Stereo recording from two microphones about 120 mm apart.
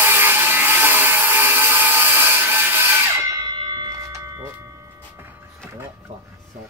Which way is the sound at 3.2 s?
35° right (ahead or behind).